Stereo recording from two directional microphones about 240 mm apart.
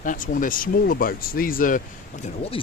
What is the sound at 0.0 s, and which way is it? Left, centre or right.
Speech, left.